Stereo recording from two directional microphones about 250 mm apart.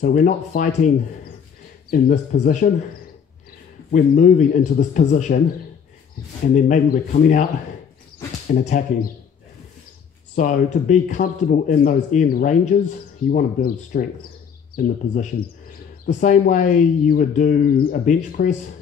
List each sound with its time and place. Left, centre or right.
0.0 s speech: left
1.9 s speech: left
3.9 s speech: left
6.5 s speech: left
8.5 s speech: left
10.3 s speech: left
16.1 s speech: left